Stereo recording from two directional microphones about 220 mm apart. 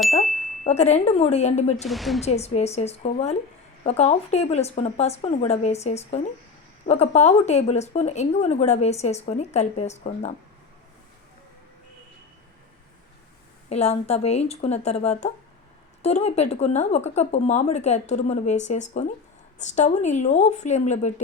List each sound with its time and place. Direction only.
0.6 s speech: 30° left (ahead or behind)
1.7 s speech: centre (ahead or behind)
2.2 s speech: 30° left (ahead or behind)
13.7 s speech: 30° left (ahead or behind)